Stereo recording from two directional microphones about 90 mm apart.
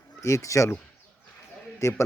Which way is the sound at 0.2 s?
35° left (ahead or behind).